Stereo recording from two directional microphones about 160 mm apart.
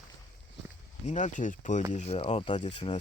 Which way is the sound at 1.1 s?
50° left (ahead or behind).